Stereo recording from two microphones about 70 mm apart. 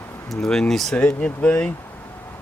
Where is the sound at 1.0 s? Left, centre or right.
Left.